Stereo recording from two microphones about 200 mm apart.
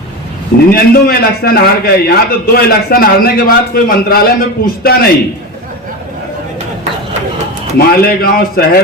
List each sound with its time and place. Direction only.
0.7 s a man's voice: 50° left (ahead or behind)
7.8 s a man's voice: 50° left (ahead or behind)